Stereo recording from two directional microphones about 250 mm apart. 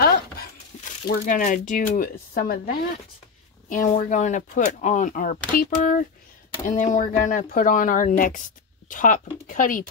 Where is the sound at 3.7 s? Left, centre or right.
Left.